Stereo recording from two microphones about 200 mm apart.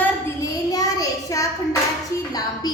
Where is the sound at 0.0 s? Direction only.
15° left (ahead or behind).